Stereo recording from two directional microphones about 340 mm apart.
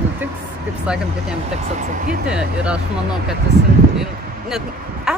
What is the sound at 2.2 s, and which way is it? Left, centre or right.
Speech, centre.